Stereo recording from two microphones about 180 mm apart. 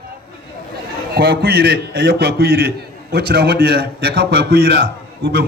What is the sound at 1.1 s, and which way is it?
A man's voice, 60° right (ahead or behind).